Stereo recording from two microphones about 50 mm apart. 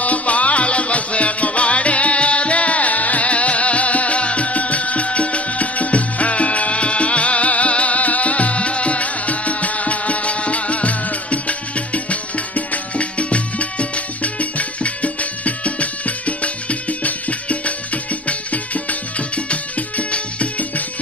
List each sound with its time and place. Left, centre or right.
0.0 s music: left